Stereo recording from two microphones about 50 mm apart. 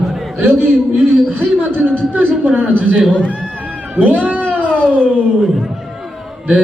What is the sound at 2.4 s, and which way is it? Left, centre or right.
Speech, right.